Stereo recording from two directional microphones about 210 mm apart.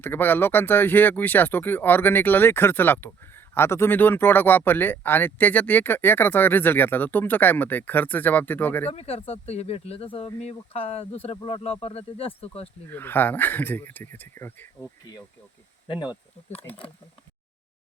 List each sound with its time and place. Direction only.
0.0 s speech: 10° left (ahead or behind)
8.9 s speech: 30° left (ahead or behind)
12.9 s speech: 10° left (ahead or behind); by 16.9 s 25° left (ahead or behind)